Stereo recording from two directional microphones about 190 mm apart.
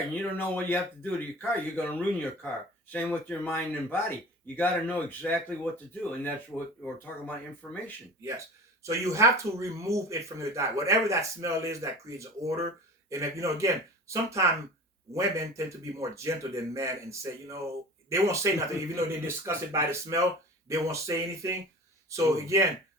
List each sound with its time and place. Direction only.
0.1 s speech: 10° left (ahead or behind)
2.9 s speech: 10° left (ahead or behind)
8.8 s a man's voice: 15° right (ahead or behind)